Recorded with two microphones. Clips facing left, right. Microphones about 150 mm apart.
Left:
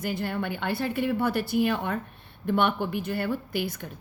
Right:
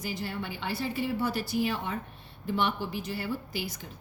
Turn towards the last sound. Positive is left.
turn(degrees=55)  # may be behind; listen again after turning